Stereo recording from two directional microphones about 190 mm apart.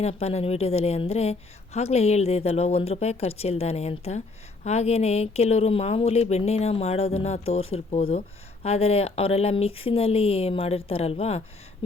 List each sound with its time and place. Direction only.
0.0 s a woman's voice: 35° left (ahead or behind)